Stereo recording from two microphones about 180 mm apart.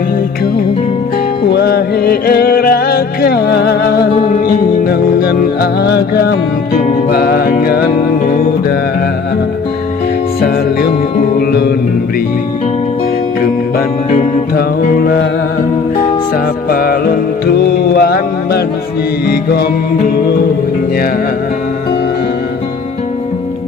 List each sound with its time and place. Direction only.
1.5 s music: 60° left (ahead or behind)
10.4 s music: 60° left (ahead or behind)
13.4 s music: 55° left (ahead or behind)
16.6 s music: 55° left (ahead or behind)